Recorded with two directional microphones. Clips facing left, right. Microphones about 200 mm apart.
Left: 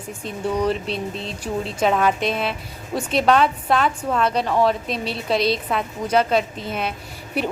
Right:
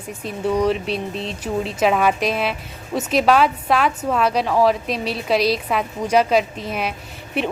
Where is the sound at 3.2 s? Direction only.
5° right (ahead or behind).